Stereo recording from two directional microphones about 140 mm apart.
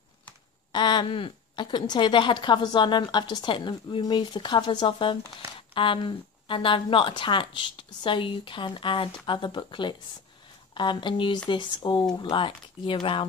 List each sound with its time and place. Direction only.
0.7 s a woman's voice: 35° left (ahead or behind)